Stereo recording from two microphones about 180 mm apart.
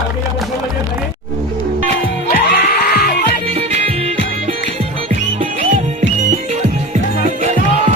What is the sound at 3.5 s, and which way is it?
Music, 35° right (ahead or behind).